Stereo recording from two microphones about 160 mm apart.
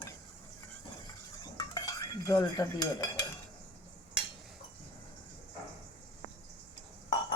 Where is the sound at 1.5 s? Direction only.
25° left (ahead or behind).